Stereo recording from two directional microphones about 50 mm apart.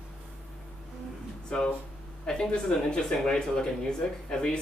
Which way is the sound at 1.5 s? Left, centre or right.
Centre.